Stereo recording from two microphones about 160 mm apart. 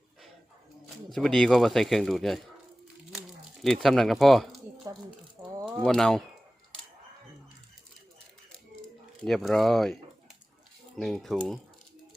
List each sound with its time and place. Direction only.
1.1 s speech: centre (ahead or behind)
4.9 s speech: 20° right (ahead or behind)
5.8 s speech: 5° left (ahead or behind)
8.8 s speech: centre (ahead or behind)